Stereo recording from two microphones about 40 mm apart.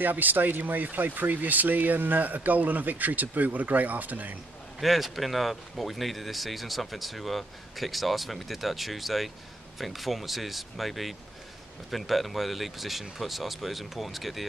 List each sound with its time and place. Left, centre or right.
0.0 s speech: right
4.7 s speech: centre